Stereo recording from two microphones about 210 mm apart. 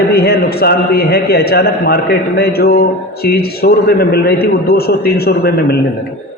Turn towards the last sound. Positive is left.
turn(degrees=50)  # may be behind; listen again after turning